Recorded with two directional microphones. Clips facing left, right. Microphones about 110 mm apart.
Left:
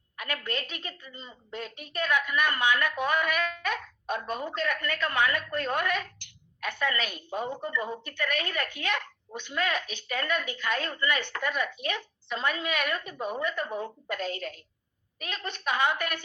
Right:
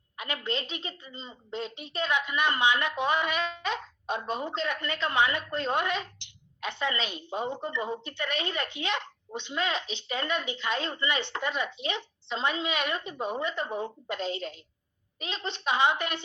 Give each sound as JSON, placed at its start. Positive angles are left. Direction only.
{"t": 0.2, "sound": "a woman's voice", "side_deg": -20}